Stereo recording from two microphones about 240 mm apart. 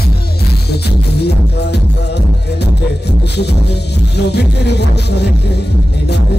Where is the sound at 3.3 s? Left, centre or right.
Left.